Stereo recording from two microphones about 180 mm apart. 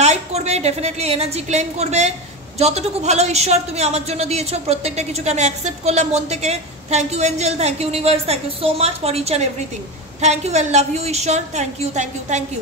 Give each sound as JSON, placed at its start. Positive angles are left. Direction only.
{"t": 0.0, "sound": "a woman's voice", "side_deg": -35}